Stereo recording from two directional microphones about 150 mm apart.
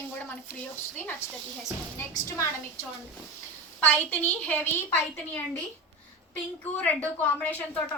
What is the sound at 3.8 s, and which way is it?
Speech, 10° left (ahead or behind).